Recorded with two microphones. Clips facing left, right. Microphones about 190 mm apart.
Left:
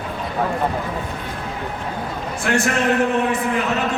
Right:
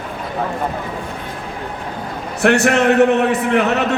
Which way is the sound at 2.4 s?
70° right (ahead or behind).